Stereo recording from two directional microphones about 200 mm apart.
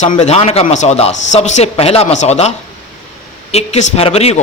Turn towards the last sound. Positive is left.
turn(degrees=30)  # may be behind; listen again after turning